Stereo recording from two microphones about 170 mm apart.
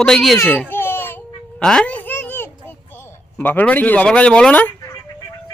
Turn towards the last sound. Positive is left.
turn(degrees=10)  # may be behind; listen again after turning